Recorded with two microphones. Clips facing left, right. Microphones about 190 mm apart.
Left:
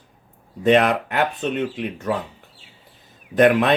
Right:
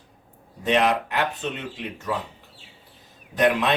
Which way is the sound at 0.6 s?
55° left (ahead or behind).